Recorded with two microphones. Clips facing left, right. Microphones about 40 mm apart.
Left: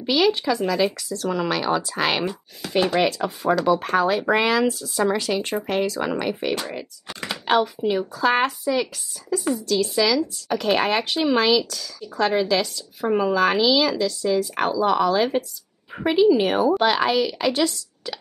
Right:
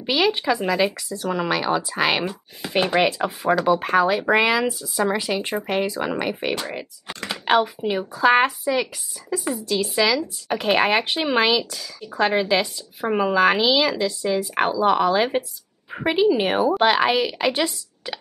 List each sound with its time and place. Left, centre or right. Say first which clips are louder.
0.0 s speech: left 1 dB; centre
2.6 s speech: right 1 dB; right
9.3 s speech: left 2 dB; right